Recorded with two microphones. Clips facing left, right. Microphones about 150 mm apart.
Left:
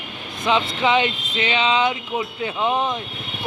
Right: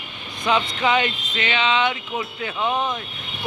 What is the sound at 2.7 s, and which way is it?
Speech, 5° left (ahead or behind).